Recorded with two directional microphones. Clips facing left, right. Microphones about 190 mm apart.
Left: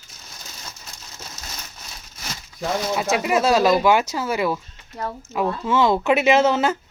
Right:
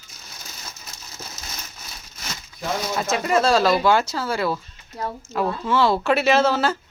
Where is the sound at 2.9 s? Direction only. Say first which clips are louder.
Even; 10° left (ahead or behind).